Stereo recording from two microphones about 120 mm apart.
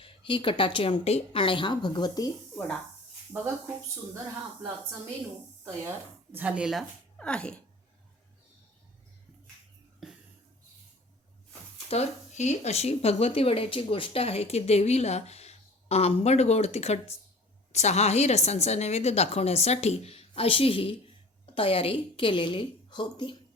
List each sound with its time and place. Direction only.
0.0 s a woman's voice: 45° left (ahead or behind)
3.3 s speech: 15° right (ahead or behind)
6.3 s speech: 10° right (ahead or behind)
7.2 s speech: 10° left (ahead or behind)
11.9 s a woman's voice: 65° left (ahead or behind); by 23.3 s 40° left (ahead or behind)